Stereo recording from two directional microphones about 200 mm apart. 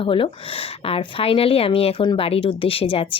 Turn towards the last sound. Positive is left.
turn(degrees=25)  # may be behind; listen again after turning